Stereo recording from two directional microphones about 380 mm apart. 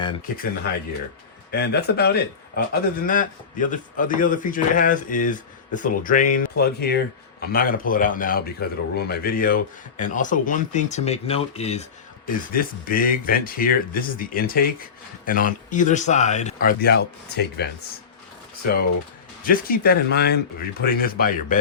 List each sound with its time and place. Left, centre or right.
0.0 s speech: centre
1.5 s speech: left
19.5 s speech: left